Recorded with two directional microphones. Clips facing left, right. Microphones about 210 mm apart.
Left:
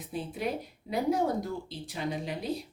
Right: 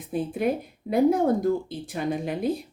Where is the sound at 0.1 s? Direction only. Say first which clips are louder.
Right 8 dB; 55° right (ahead or behind).